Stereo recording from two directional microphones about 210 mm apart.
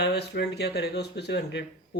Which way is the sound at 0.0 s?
50° left (ahead or behind).